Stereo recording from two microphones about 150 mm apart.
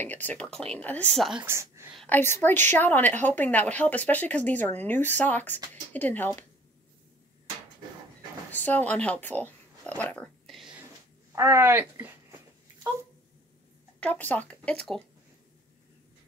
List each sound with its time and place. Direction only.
0.1 s a woman's voice: 10° left (ahead or behind)
1.4 s speech: 20° right (ahead or behind)
2.0 s a woman's voice: 15° left (ahead or behind)
8.5 s speech: 10° left (ahead or behind)
11.3 s speech: 15° right (ahead or behind)
13.9 s speech: 10° left (ahead or behind)